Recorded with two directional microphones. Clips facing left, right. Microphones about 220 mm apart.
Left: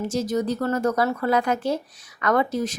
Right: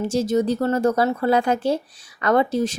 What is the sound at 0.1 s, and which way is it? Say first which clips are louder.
Speech: right 5 dB; 30° right (ahead or behind).